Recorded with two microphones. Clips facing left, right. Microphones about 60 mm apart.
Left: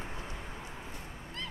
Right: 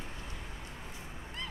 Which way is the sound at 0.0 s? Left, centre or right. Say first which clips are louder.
Left 3 dB; left.